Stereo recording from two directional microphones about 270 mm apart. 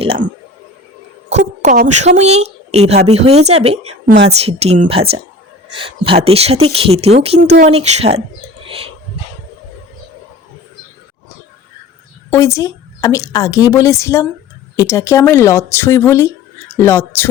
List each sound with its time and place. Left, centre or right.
0.0 s speech: right
1.3 s speech: right
12.3 s a woman's voice: centre